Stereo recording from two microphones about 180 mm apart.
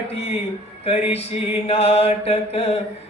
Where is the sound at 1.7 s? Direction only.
35° left (ahead or behind).